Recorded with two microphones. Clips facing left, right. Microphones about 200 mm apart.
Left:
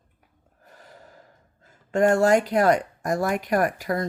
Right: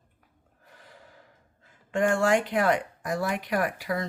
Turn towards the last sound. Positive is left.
turn(degrees=45)  # may be behind; listen again after turning